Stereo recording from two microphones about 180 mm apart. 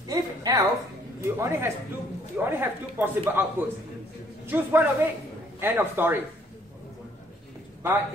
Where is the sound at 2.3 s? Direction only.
10° right (ahead or behind).